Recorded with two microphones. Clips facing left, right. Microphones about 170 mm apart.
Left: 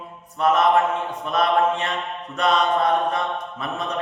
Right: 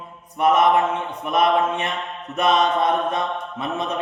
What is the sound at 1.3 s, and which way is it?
Mantra, 20° right (ahead or behind).